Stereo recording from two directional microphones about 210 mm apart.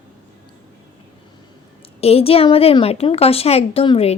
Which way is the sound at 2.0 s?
30° left (ahead or behind).